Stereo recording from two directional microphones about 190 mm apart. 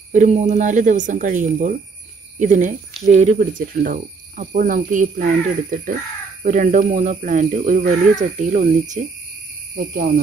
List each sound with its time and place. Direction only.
0.1 s speech: 40° right (ahead or behind)